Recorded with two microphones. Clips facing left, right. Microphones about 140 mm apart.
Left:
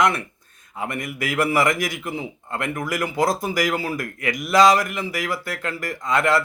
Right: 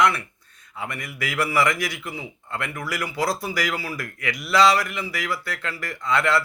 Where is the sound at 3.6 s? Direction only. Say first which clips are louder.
Left 5 dB; 45° left (ahead or behind).